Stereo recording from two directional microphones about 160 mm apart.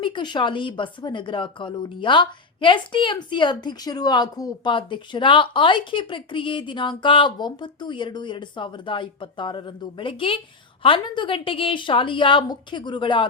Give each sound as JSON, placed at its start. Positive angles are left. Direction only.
{"t": 0.0, "sound": "a woman's voice", "side_deg": 30}